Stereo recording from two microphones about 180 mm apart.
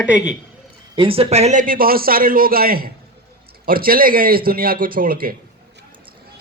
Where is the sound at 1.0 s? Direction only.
30° right (ahead or behind); by 5.3 s 55° right (ahead or behind).